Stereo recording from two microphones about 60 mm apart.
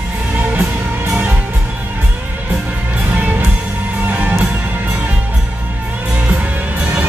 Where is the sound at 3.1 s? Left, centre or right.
Right.